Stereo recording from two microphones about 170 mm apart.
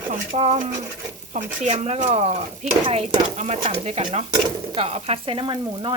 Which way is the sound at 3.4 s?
40° right (ahead or behind).